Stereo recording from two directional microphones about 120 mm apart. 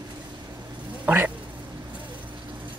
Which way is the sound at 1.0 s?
15° right (ahead or behind).